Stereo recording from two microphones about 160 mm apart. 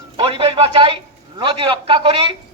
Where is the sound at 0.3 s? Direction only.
35° right (ahead or behind).